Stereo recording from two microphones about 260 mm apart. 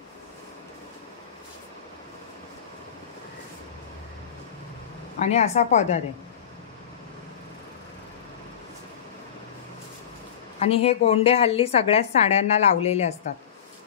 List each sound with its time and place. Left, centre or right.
5.2 s a woman's voice: left
10.6 s a woman's voice: left